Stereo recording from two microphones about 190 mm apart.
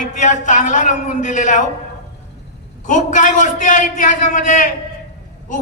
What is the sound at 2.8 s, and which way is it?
A man's voice, 40° left (ahead or behind).